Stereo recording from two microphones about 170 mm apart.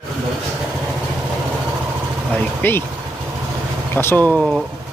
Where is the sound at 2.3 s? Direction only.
10° left (ahead or behind).